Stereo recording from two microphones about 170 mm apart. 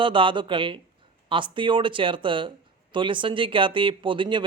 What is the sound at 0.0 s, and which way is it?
Speech, 30° right (ahead or behind).